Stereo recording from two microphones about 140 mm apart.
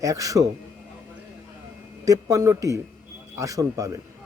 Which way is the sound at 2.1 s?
25° right (ahead or behind).